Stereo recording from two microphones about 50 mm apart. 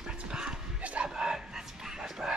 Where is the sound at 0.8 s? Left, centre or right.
Right.